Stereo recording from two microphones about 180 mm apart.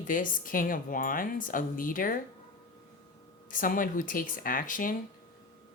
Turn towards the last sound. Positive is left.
turn(degrees=50)  # may be behind; listen again after turning